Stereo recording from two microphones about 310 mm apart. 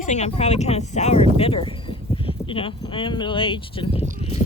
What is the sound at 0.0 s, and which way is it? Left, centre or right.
Speech, left.